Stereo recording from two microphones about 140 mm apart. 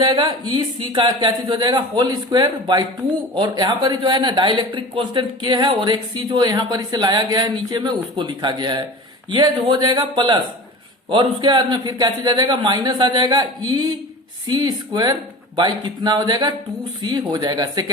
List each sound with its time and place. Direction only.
0.0 s speech: 30° right (ahead or behind)